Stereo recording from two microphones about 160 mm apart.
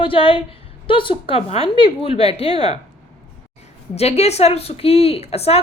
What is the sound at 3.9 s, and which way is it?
A woman's voice, 40° left (ahead or behind).